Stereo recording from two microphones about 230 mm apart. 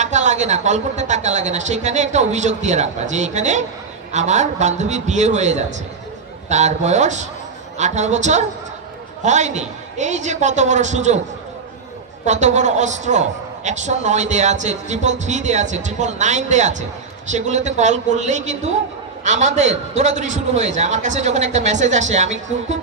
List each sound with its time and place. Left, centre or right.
0.0 s a man's voice: right
12.3 s a man's voice: right